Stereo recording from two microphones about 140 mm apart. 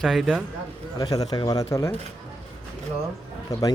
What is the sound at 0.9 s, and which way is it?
Speech, 25° left (ahead or behind).